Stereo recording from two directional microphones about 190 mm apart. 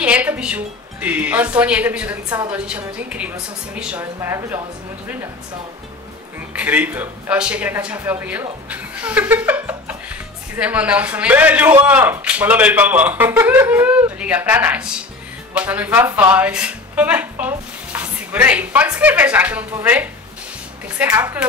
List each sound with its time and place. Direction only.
0.0 s speech: 5° right (ahead or behind)
6.5 s a man's voice: 10° right (ahead or behind)